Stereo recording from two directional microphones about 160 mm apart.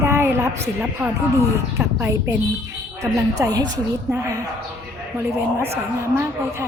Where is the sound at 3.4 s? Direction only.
25° right (ahead or behind).